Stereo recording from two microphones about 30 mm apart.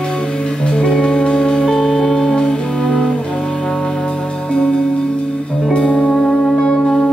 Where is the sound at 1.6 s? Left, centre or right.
Centre.